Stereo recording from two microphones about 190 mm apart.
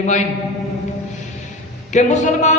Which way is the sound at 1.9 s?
40° left (ahead or behind).